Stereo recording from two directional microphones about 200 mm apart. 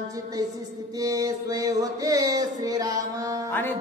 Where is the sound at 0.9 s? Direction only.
15° right (ahead or behind).